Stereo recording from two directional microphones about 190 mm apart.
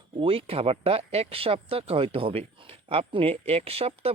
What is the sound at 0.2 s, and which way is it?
Speech, 30° right (ahead or behind).